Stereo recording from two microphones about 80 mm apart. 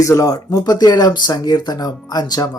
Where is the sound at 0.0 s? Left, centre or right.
Left.